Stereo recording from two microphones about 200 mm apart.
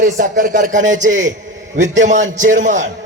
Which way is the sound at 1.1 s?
75° right (ahead or behind).